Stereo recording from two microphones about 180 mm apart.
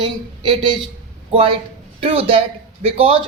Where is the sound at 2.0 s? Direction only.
30° right (ahead or behind).